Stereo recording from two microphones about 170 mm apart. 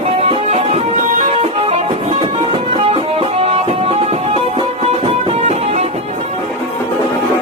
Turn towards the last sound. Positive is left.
turn(degrees=-40)  # may be behind; listen again after turning